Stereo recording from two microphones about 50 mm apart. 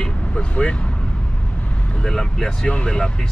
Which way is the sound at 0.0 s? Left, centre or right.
Left.